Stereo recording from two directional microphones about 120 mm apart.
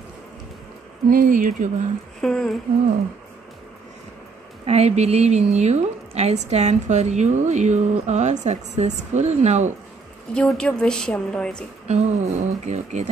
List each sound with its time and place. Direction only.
1.1 s speech: 90° right
2.2 s a sound: 5° left (ahead or behind)
4.6 s a woman's voice: 65° right (ahead or behind)
10.3 s a woman's voice: 5° left (ahead or behind)
11.9 s a woman's voice: 70° right (ahead or behind)